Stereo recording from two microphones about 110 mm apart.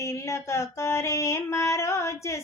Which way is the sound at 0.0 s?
25° left (ahead or behind).